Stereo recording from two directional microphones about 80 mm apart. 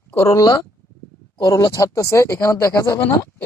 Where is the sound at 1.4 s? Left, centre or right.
Left.